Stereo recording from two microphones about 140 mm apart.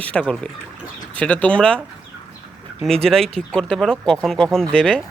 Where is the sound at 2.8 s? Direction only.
5° left (ahead or behind).